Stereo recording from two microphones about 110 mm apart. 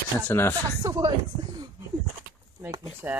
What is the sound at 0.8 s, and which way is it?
Speech, 30° right (ahead or behind).